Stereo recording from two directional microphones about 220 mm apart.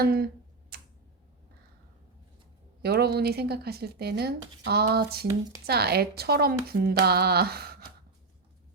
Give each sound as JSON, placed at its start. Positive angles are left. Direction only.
{"t": 0.0, "sound": "speech", "side_deg": -45}
{"t": 0.7, "sound": "tick-tock", "side_deg": -45}
{"t": 2.8, "sound": "speech", "side_deg": -45}